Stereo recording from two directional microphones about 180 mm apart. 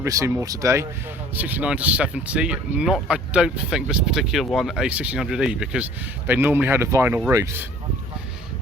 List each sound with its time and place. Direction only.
0.0 s speech: 15° right (ahead or behind)